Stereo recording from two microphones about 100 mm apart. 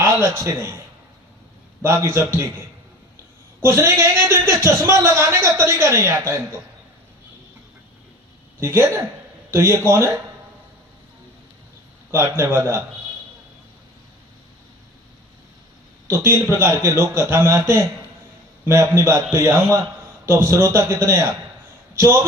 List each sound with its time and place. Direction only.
0.0 s a man's voice: 25° right (ahead or behind)
1.8 s a man's voice: 25° right (ahead or behind)
3.6 s a man's voice: 25° right (ahead or behind)
8.6 s a man's voice: 25° right (ahead or behind)
12.1 s a man's voice: 25° right (ahead or behind)
16.0 s a man's voice: 25° right (ahead or behind)